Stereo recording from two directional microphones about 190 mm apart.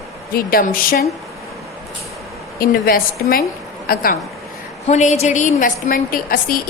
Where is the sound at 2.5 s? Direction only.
50° left (ahead or behind).